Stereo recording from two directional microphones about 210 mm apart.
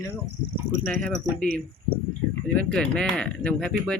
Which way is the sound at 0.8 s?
5° left (ahead or behind).